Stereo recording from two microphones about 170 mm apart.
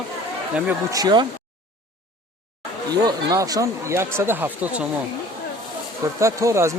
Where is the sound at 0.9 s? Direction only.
25° right (ahead or behind).